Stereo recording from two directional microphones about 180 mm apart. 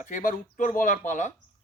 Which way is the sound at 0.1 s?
45° left (ahead or behind).